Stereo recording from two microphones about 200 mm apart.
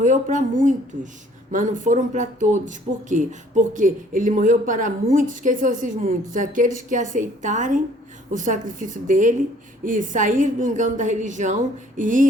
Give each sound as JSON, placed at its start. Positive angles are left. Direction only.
{"t": 0.0, "sound": "a woman's voice", "side_deg": -40}
{"t": 1.5, "sound": "speech", "side_deg": -40}